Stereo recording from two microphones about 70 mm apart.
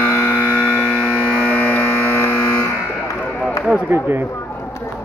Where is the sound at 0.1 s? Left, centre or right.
Left.